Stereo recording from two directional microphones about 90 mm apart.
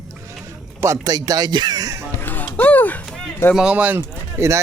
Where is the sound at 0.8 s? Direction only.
40° right (ahead or behind).